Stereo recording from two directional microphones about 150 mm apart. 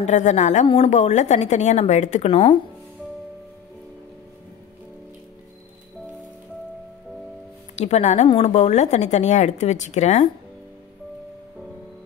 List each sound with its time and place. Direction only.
0.0 s a woman's voice: 50° left (ahead or behind); by 2.6 s 35° left (ahead or behind)
7.7 s a woman's voice: 50° left (ahead or behind)